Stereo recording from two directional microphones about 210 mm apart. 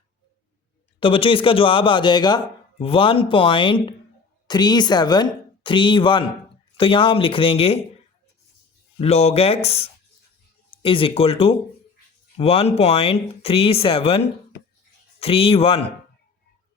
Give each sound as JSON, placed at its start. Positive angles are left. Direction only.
{"t": 0.9, "sound": "speech", "side_deg": 25}
{"t": 9.0, "sound": "speech", "side_deg": 30}
{"t": 15.2, "sound": "speech", "side_deg": 25}